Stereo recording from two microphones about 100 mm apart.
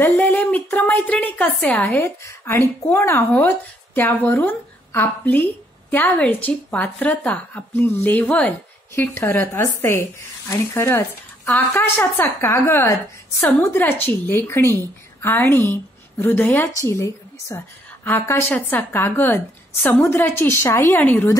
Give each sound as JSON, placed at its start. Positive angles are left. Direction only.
{"t": 0.0, "sound": "a woman's voice", "side_deg": 20}
{"t": 8.9, "sound": "a woman's voice", "side_deg": 30}